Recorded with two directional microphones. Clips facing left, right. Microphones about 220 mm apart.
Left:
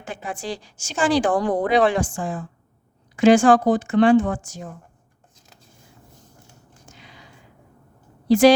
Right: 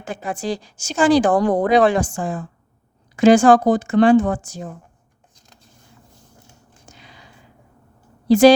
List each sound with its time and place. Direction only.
0.0 s a woman's voice: 40° right (ahead or behind)
8.3 s a woman's voice: 30° right (ahead or behind)